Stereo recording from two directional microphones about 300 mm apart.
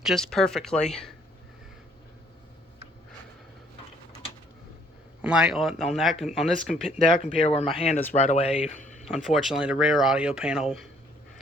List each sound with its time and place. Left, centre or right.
0.0 s speech: centre
5.2 s speech: centre
7.2 s speech: left
9.0 s speech: centre